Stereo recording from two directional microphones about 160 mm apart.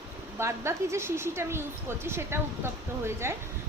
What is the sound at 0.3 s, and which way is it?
A woman's voice, 15° right (ahead or behind).